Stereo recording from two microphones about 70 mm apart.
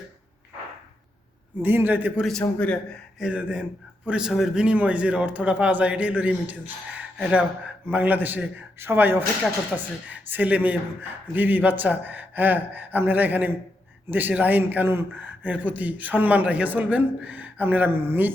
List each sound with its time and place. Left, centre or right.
1.6 s a man's voice: right
2.4 s a man's voice: centre
3.2 s a man's voice: centre
7.9 s a man's voice: right